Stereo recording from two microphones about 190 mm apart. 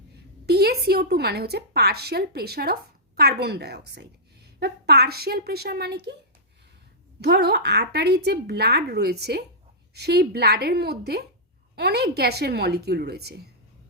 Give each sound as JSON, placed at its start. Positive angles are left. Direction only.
{"t": 0.4, "sound": "a woman's voice", "side_deg": -55}
{"t": 7.2, "sound": "a woman's voice", "side_deg": -60}